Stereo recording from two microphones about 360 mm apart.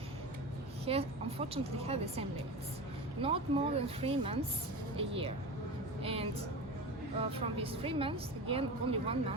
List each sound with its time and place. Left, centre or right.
0.9 s a woman's voice: centre